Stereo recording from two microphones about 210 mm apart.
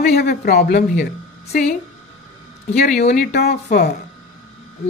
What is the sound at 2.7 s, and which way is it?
Speech, 50° left (ahead or behind).